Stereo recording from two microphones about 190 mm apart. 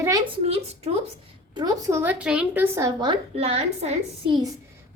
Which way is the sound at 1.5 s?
20° right (ahead or behind).